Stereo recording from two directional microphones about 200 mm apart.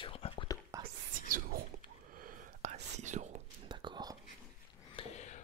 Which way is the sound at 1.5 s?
50° right (ahead or behind).